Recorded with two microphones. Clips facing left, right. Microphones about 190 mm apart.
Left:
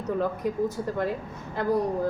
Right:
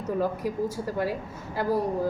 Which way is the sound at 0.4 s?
5° right (ahead or behind).